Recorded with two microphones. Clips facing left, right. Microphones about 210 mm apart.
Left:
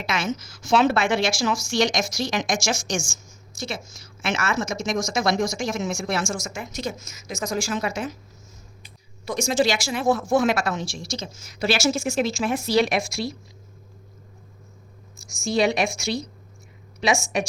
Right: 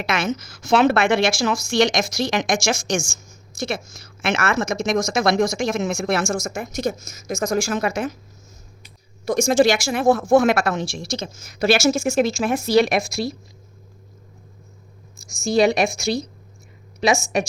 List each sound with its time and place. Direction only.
0.0 s a woman's voice: 60° right (ahead or behind)
9.2 s a woman's voice: 45° right (ahead or behind)
15.2 s a woman's voice: 40° right (ahead or behind)